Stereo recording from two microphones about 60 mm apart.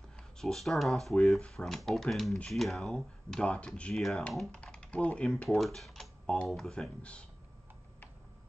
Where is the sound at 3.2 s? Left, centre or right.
Centre.